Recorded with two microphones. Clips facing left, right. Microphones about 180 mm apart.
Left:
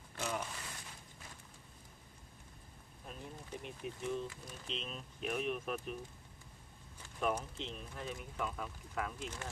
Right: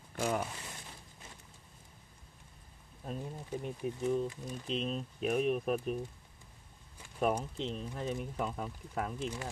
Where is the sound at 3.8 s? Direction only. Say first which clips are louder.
Right 7 dB; 35° right (ahead or behind).